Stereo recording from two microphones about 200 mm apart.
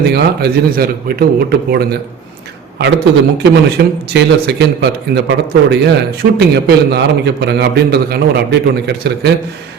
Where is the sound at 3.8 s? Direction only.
55° right (ahead or behind).